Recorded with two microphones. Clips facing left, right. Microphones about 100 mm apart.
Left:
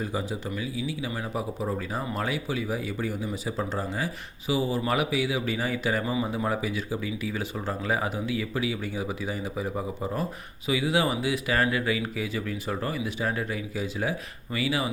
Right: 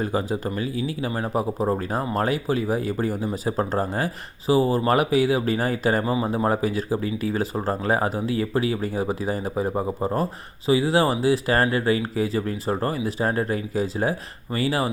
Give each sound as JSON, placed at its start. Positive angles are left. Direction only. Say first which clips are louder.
{"t": 0.0, "sound": "speech", "louder": "right 6 dB", "side_deg": -55}